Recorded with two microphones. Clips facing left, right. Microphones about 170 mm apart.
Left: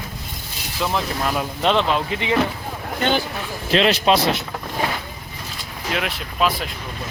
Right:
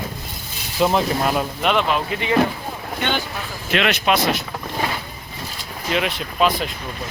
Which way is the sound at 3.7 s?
30° left (ahead or behind).